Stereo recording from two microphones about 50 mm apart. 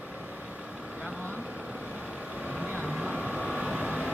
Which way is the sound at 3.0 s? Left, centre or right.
Centre.